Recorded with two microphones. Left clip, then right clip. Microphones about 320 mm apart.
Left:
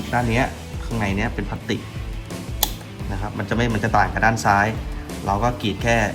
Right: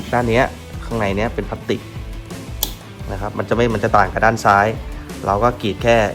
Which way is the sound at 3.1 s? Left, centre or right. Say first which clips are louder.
Right 6 dB; right.